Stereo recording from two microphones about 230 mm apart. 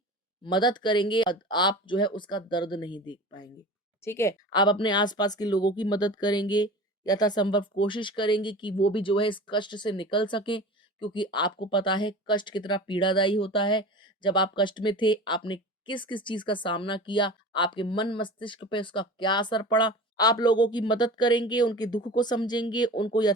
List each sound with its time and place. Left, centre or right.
0.4 s speech: centre